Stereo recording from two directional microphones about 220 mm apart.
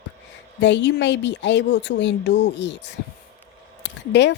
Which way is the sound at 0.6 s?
55° left (ahead or behind).